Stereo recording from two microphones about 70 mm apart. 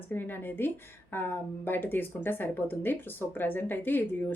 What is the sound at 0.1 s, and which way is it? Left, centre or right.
A woman's voice, left.